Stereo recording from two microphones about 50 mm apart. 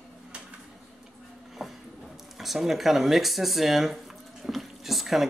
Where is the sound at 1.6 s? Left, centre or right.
Centre.